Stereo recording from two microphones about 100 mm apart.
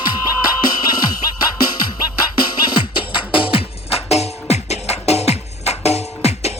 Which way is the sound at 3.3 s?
60° left (ahead or behind).